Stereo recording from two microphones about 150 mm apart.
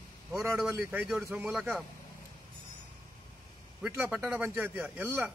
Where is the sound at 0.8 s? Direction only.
10° right (ahead or behind).